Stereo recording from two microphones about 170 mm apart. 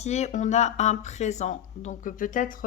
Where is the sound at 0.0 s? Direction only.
40° left (ahead or behind).